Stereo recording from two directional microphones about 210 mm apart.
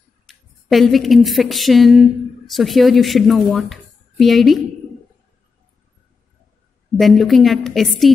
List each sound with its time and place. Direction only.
0.3 s speech: centre (ahead or behind)
7.0 s a woman's voice: centre (ahead or behind)